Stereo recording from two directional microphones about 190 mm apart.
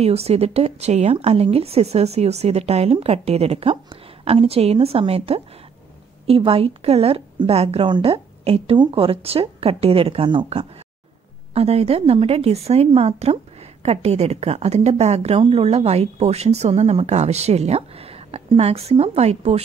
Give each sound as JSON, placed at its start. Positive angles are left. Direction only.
{"t": 0.0, "sound": "a woman's voice", "side_deg": -30}